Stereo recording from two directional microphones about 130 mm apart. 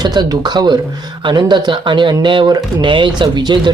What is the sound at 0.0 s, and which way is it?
Speech, 35° right (ahead or behind).